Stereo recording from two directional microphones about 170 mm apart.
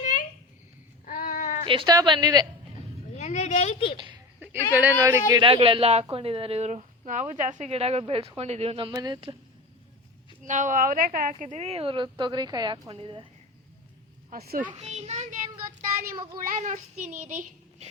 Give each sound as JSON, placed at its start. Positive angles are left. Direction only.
{"t": 0.0, "sound": "a sound", "side_deg": 50}
{"t": 1.6, "sound": "a woman's voice", "side_deg": -30}
{"t": 3.2, "sound": "a sound", "side_deg": 40}
{"t": 3.9, "sound": "a woman's voice", "side_deg": -25}
{"t": 4.7, "sound": "speech", "side_deg": -10}
{"t": 5.3, "sound": "a woman's voice", "side_deg": -30}
{"t": 10.4, "sound": "a woman's voice", "side_deg": -45}
{"t": 14.3, "sound": "speech", "side_deg": -65}
{"t": 14.7, "sound": "a woman's voice", "side_deg": -40}
{"t": 16.4, "sound": "a child's voice", "side_deg": -50}